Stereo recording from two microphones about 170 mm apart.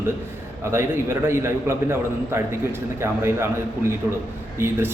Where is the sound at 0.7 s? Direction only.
15° right (ahead or behind).